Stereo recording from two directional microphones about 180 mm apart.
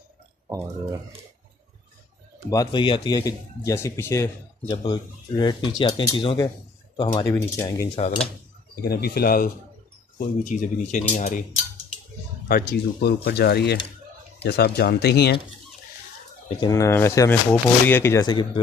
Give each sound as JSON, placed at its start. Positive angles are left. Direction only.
{"t": 2.5, "sound": "speech", "side_deg": 25}
{"t": 8.8, "sound": "speech", "side_deg": 60}
{"t": 10.1, "sound": "speech", "side_deg": 45}
{"t": 12.4, "sound": "speech", "side_deg": 60}
{"t": 16.4, "sound": "speech", "side_deg": 25}